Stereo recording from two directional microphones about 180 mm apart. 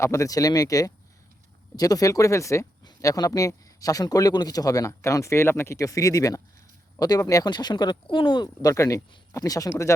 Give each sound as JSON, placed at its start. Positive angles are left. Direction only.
{"t": 0.0, "sound": "speech", "side_deg": 15}